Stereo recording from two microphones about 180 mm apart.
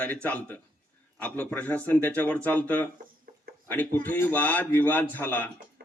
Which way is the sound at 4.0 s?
10° left (ahead or behind).